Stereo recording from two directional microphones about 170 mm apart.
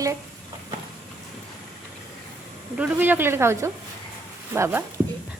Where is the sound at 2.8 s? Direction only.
10° right (ahead or behind).